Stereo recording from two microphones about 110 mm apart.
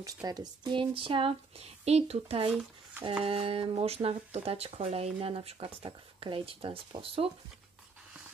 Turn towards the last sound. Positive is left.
turn(degrees=-55)  # may be behind; listen again after turning